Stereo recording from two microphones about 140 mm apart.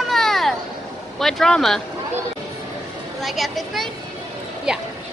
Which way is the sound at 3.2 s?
Centre (ahead or behind).